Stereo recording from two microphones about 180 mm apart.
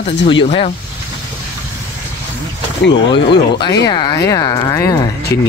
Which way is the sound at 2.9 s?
25° left (ahead or behind).